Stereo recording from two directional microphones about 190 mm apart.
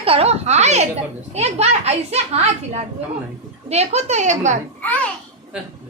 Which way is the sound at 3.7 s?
35° right (ahead or behind).